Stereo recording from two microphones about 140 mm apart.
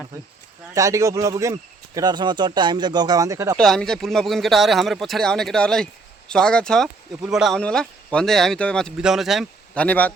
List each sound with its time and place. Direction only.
0.7 s speech: 20° right (ahead or behind)
3.6 s speech: 5° left (ahead or behind)
9.7 s speech: 10° left (ahead or behind)